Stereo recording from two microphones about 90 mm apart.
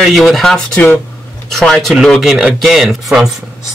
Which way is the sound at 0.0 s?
Centre (ahead or behind).